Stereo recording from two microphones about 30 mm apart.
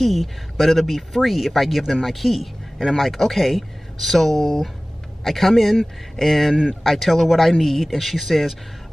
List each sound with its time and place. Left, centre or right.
0.0 s speech: centre
3.1 s speech: centre
6.5 s speech: centre
6.8 s speech: centre